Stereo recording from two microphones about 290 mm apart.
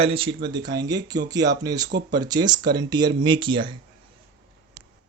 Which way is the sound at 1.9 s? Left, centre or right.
Right.